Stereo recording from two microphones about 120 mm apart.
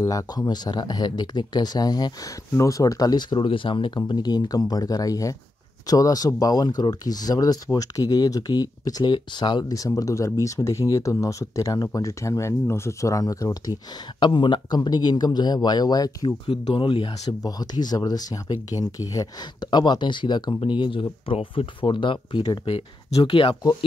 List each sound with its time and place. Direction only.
0.0 s speech: 25° left (ahead or behind)
14.2 s speech: 40° left (ahead or behind)
16.4 s speech: 45° left (ahead or behind)
17.3 s speech: 35° left (ahead or behind)
22.7 s speech: 55° left (ahead or behind)